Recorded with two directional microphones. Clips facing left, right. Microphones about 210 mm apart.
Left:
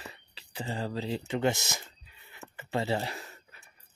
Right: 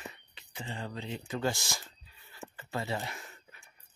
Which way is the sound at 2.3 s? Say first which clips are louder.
Left 5 dB; 25° left (ahead or behind).